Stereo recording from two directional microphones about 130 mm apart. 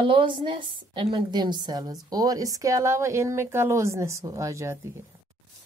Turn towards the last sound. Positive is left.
turn(degrees=-20)  # may be behind; listen again after turning